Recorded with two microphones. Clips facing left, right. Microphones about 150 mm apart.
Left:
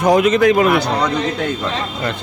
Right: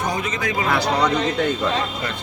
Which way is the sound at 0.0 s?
85° left.